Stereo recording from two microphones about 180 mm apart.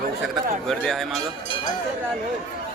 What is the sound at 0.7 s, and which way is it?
Speech, 5° left (ahead or behind).